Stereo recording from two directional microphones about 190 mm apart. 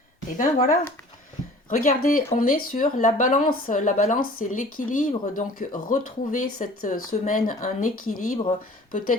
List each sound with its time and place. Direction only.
0.3 s speech: 45° left (ahead or behind)